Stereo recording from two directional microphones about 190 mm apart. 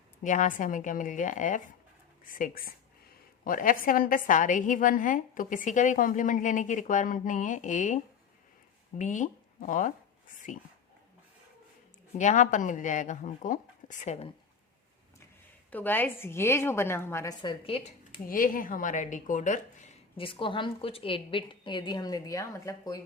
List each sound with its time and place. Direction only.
0.2 s a woman's voice: 40° left (ahead or behind)
12.1 s speech: 40° left (ahead or behind)
15.7 s a woman's voice: 10° left (ahead or behind); by 17.9 s 30° left (ahead or behind)
18.3 s a woman's voice: 45° left (ahead or behind); by 23.0 s 20° left (ahead or behind)